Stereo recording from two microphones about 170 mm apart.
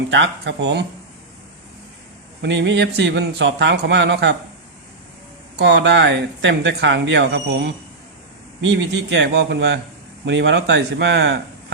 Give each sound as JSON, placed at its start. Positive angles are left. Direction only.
{"t": 0.1, "sound": "speech", "side_deg": -90}
{"t": 2.4, "sound": "speech", "side_deg": -90}
{"t": 5.5, "sound": "speech", "side_deg": -90}